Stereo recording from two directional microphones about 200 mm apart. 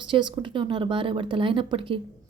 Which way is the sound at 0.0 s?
25° right (ahead or behind).